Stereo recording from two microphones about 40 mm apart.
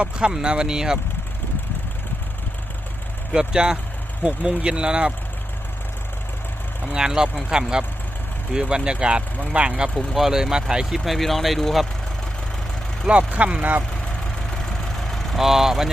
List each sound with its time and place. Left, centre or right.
0.0 s speech: right
3.3 s speech: centre
4.2 s speech: right
7.0 s speech: centre
8.7 s speech: right
9.9 s speech: centre
10.8 s speech: centre
13.1 s speech: right
15.1 s speech: centre